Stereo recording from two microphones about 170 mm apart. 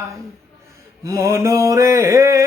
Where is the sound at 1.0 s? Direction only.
20° right (ahead or behind).